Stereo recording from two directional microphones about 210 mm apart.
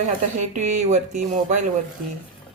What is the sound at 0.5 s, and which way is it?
A woman's voice, 35° right (ahead or behind).